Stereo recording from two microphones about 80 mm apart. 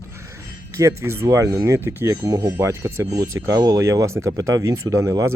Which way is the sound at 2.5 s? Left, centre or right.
Right.